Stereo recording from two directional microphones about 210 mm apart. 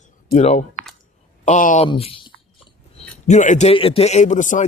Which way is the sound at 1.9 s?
25° left (ahead or behind).